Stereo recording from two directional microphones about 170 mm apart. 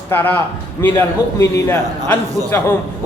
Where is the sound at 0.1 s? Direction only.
10° left (ahead or behind).